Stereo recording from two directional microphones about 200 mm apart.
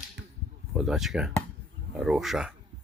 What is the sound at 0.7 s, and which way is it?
Speech, centre (ahead or behind).